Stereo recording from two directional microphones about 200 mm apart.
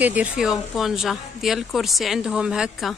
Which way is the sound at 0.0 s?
5° right (ahead or behind).